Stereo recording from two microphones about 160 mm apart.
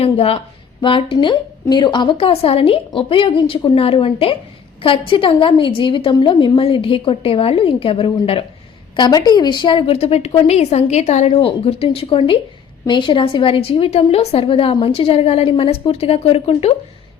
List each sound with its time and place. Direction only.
0.0 s a woman's voice: 40° left (ahead or behind)